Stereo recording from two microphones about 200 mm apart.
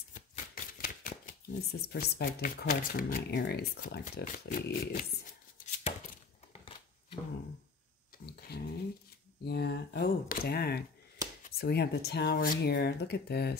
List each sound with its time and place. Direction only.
0.1 s speech: 40° left (ahead or behind)
8.3 s a sound: 55° left (ahead or behind)
9.4 s speech: 55° left (ahead or behind)